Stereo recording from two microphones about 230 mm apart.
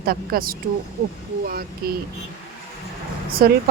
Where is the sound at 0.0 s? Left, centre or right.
Right.